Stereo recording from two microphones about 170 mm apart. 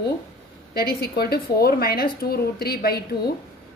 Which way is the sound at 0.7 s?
65° left (ahead or behind).